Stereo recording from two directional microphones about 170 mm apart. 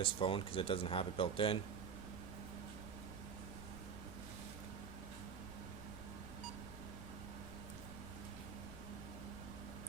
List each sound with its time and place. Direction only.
0.0 s speech: 30° left (ahead or behind)